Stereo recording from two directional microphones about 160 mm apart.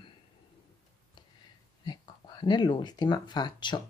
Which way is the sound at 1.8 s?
25° left (ahead or behind).